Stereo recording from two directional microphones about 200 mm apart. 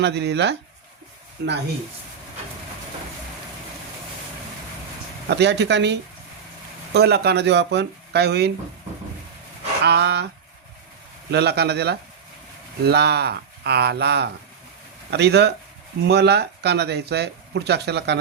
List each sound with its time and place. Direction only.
0.0 s speech: 55° right (ahead or behind)
5.3 s speech: 60° right (ahead or behind)
9.8 s speech: 55° right (ahead or behind)
11.3 s speech: 55° right (ahead or behind)